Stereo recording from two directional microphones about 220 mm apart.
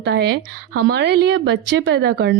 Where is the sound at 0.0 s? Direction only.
55° right (ahead or behind).